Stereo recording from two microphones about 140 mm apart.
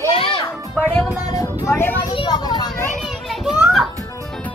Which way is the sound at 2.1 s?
30° left (ahead or behind).